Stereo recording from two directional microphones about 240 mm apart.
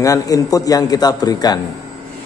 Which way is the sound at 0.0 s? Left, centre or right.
Centre.